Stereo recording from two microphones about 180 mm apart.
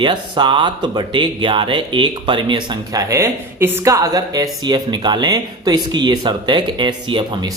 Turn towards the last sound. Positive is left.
turn(degrees=-25)  # may be behind; listen again after turning